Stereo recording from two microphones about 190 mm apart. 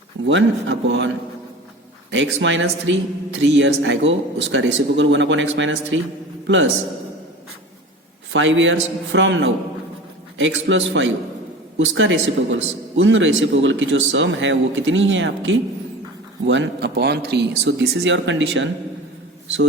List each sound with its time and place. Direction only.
0.3 s speech: 75° right (ahead or behind)
8.3 s a man's voice: 80° right